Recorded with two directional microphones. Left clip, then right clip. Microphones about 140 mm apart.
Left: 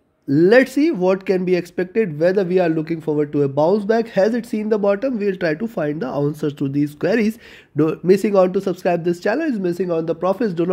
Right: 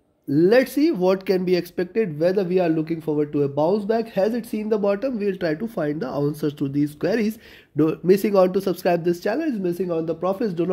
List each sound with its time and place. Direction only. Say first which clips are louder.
0.3 s speech: left 4 dB; 40° left (ahead or behind)